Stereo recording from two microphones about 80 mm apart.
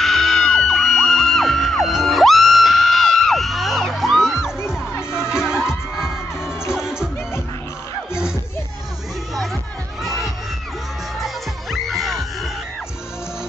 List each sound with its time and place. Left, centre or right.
0.0 s music: centre
4.9 s music: left
5.3 s music: centre
8.1 s music: centre
9.3 s music: centre
10.0 s crowd: centre
11.1 s music: centre